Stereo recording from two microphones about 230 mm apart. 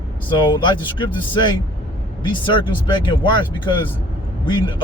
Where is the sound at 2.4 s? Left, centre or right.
Left.